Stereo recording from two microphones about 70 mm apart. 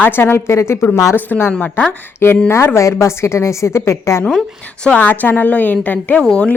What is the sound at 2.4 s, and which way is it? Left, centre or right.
A woman's voice, left.